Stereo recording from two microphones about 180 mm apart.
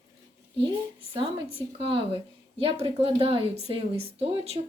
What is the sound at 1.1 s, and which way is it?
A woman's voice, 30° right (ahead or behind).